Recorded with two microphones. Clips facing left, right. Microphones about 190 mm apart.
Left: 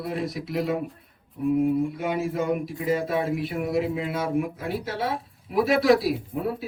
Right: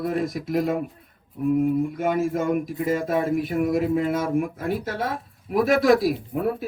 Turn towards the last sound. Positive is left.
turn(degrees=-55)  # may be behind; listen again after turning